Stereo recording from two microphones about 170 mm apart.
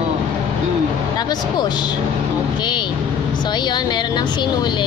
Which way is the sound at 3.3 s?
25° left (ahead or behind).